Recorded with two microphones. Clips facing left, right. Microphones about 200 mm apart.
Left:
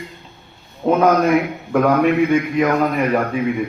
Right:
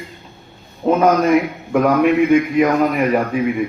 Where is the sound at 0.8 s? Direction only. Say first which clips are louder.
Even; centre (ahead or behind).